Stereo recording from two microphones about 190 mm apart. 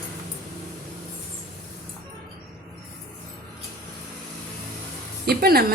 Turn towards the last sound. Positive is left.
turn(degrees=-55)  # may be behind; listen again after turning